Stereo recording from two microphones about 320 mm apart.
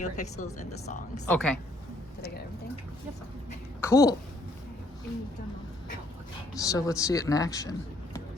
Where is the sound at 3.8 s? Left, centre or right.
Centre.